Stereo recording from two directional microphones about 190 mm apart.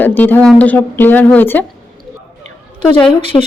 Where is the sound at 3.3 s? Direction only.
25° left (ahead or behind).